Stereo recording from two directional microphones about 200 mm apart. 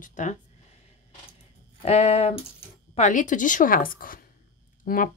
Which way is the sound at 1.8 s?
35° left (ahead or behind).